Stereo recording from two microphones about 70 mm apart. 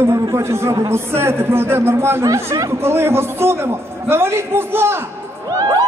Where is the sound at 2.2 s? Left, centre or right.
Right.